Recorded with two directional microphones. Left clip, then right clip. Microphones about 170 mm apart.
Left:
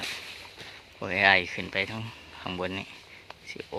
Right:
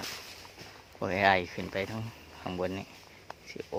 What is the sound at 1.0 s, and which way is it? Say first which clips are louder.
Speech: left 4 dB; 10° right (ahead or behind).